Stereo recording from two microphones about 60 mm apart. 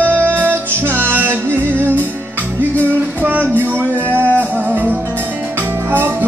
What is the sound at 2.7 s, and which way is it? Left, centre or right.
Music, left.